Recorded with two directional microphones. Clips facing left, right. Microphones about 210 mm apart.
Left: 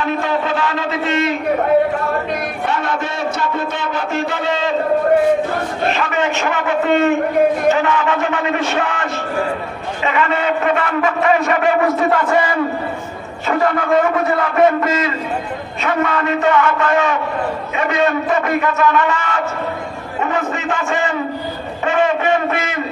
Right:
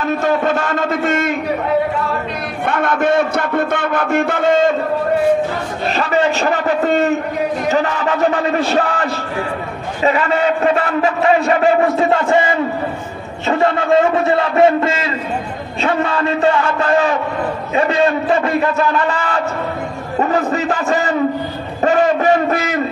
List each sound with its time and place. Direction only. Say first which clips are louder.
0.0 s a man's voice: right 3 dB; 45° right (ahead or behind)
2.6 s a sound: right 8 dB; 55° right (ahead or behind)
5.9 s a man's voice: right 4 dB; 35° right (ahead or behind)